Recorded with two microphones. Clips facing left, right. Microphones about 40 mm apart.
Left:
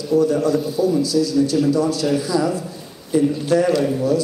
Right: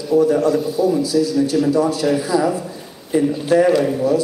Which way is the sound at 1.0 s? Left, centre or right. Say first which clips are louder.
Right 1 dB; right.